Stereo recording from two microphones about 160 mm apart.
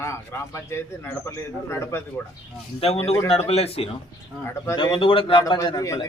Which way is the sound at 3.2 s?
40° left (ahead or behind).